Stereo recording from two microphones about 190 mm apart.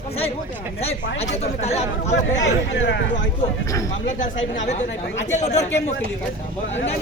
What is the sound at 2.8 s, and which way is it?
Speech, 70° left (ahead or behind).